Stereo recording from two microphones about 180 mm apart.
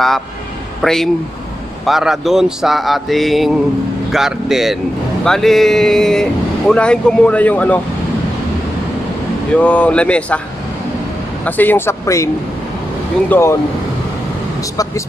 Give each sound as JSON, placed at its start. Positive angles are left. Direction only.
{"t": 0.8, "sound": "speech", "side_deg": 5}
{"t": 9.6, "sound": "speech", "side_deg": 10}
{"t": 11.4, "sound": "speech", "side_deg": 10}
{"t": 13.3, "sound": "speech", "side_deg": 15}
{"t": 14.6, "sound": "vehicle", "side_deg": 20}